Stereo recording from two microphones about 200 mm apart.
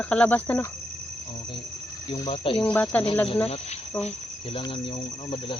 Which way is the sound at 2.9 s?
5° left (ahead or behind).